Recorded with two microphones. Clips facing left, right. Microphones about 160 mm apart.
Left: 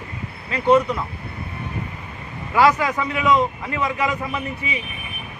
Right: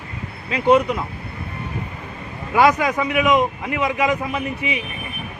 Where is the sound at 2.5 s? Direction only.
15° right (ahead or behind).